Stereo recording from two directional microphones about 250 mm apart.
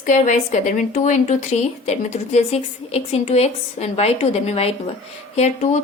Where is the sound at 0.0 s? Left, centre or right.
Left.